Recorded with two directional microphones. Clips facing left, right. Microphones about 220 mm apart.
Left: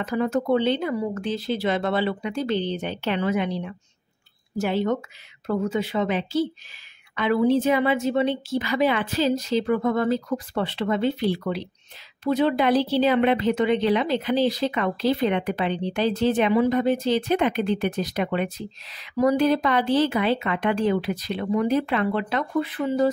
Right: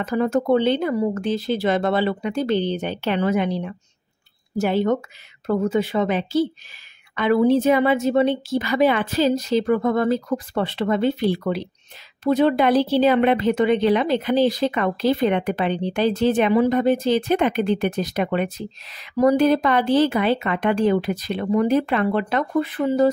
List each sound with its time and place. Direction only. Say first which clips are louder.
0.0 s speech: right 3 dB; 45° right (ahead or behind)